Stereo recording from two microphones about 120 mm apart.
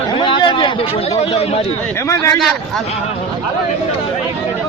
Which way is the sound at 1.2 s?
60° left (ahead or behind).